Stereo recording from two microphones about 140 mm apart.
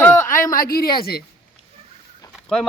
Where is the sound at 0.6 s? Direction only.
90° left.